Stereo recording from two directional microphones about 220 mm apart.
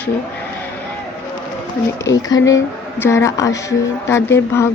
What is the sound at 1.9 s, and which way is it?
Speech, 15° left (ahead or behind).